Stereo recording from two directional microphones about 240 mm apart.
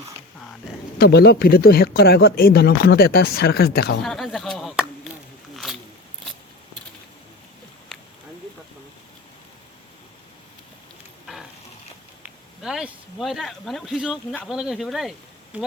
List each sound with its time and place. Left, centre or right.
0.9 s speech: left
4.0 s chop: centre
12.2 s speech: centre